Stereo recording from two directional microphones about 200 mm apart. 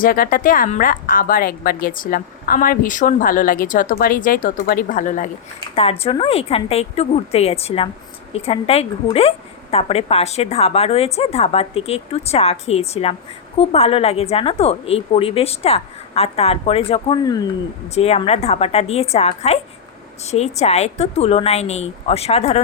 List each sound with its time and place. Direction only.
0.0 s a woman's voice: 45° left (ahead or behind)
5.7 s a woman's voice: 30° left (ahead or behind)
17.9 s a woman's voice: 30° left (ahead or behind)